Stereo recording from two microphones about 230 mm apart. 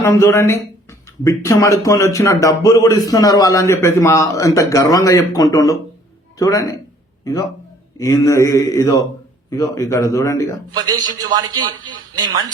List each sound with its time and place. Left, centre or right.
0.0 s a man's voice: centre
7.9 s a man's voice: centre
10.8 s a man's voice: centre